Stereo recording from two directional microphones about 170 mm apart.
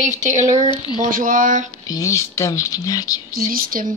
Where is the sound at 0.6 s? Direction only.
25° left (ahead or behind).